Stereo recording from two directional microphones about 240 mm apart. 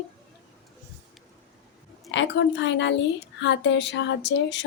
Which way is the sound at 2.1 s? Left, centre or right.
Left.